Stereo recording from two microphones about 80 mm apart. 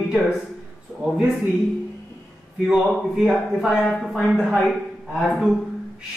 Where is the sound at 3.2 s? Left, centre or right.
Centre.